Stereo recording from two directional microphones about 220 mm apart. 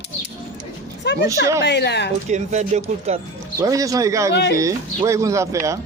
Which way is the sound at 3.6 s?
15° right (ahead or behind).